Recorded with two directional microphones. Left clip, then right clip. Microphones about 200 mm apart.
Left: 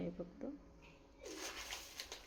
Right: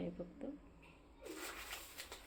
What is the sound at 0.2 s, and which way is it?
Speech, 5° left (ahead or behind).